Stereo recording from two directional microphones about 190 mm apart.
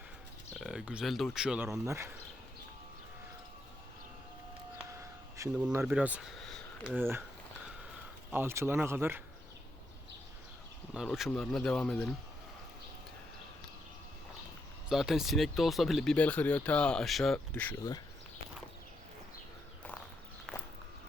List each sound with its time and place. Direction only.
0.5 s speech: 5° right (ahead or behind)
4.9 s a sound: 15° right (ahead or behind)
5.7 s speech: 5° right (ahead or behind)
8.3 s speech: 10° right (ahead or behind)
10.9 s speech: centre (ahead or behind)
14.8 s speech: centre (ahead or behind)
20.5 s walk: centre (ahead or behind)